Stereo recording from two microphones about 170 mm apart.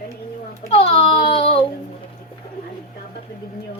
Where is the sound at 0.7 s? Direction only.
35° left (ahead or behind).